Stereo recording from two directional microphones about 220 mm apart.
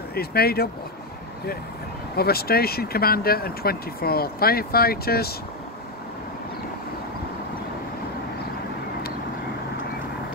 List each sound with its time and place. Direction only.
0.1 s speech: 45° left (ahead or behind)
2.1 s speech: 45° left (ahead or behind)